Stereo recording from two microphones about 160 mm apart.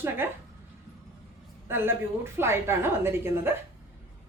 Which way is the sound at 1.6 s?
15° right (ahead or behind).